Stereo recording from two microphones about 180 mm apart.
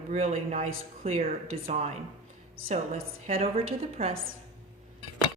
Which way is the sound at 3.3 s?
35° right (ahead or behind).